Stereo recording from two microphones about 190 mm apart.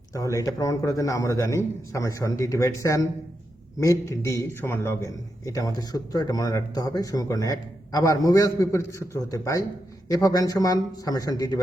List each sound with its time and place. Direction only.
0.1 s a man's voice: 15° left (ahead or behind)